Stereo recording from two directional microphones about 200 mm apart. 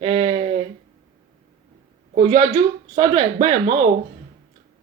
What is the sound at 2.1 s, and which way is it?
Speech, 35° right (ahead or behind).